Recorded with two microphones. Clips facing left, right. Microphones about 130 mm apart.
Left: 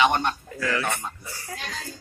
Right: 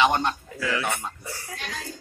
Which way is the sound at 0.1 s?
20° right (ahead or behind).